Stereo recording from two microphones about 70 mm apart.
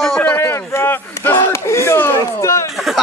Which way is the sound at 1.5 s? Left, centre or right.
Left.